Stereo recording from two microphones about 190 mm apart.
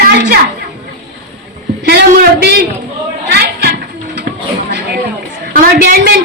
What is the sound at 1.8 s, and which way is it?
Speech, 60° right (ahead or behind).